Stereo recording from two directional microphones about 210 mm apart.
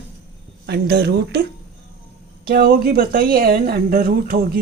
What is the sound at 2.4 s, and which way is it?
Speech, 45° right (ahead or behind).